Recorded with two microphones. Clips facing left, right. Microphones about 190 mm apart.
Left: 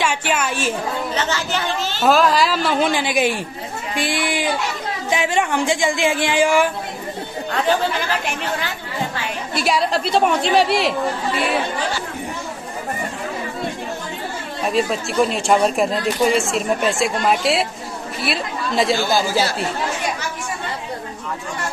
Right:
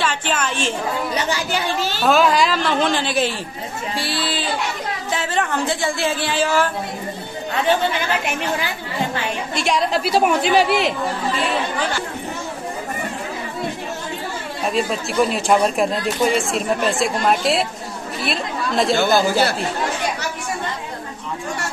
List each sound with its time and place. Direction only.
0.0 s a woman's voice: 10° left (ahead or behind)
1.1 s speech: 15° right (ahead or behind)
2.0 s a woman's voice: centre (ahead or behind)
9.6 s speech: 5° left (ahead or behind)
14.7 s speech: centre (ahead or behind)
19.1 s speech: 60° right (ahead or behind)